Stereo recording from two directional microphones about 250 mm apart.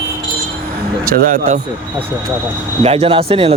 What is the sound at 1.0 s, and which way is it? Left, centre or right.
Speech, right.